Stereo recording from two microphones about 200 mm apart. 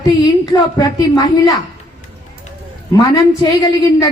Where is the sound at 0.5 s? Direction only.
20° left (ahead or behind).